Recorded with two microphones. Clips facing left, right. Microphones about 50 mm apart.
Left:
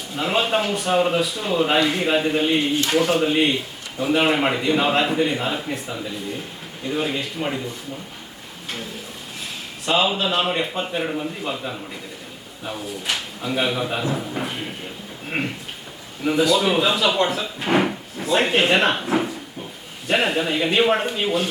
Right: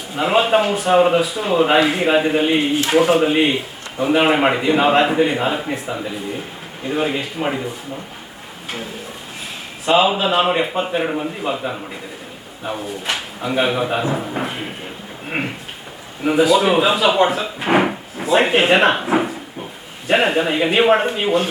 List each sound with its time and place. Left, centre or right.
0.1 s speech: centre
0.9 s speech: centre
9.8 s speech: centre
12.8 s speech: centre